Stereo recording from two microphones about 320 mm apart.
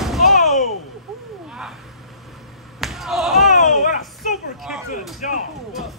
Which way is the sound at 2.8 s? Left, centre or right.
Centre.